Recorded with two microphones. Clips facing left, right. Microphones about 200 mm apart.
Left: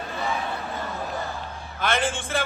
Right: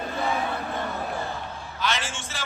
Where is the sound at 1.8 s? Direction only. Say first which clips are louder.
Left 5 dB; 55° left (ahead or behind).